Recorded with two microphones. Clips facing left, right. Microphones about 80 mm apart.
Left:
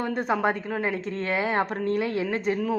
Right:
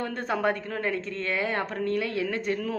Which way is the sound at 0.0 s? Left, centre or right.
Centre.